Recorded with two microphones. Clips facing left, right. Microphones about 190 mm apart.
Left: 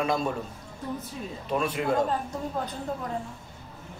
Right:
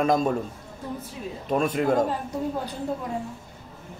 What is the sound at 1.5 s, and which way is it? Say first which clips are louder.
Speech: right 4 dB; 45° right (ahead or behind).